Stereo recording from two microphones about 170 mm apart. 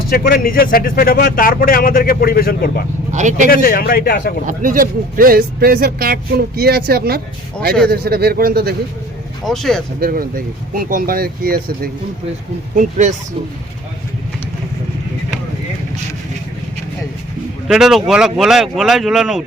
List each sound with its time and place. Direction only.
0.1 s speech: 60° left (ahead or behind)
3.1 s speech: 45° right (ahead or behind)
3.5 s speech: 60° left (ahead or behind)
4.4 s speech: 55° right (ahead or behind)
9.4 s speech: centre (ahead or behind)
10.0 s speech: 60° right (ahead or behind)
12.7 s speech: 45° right (ahead or behind)
17.7 s speech: centre (ahead or behind)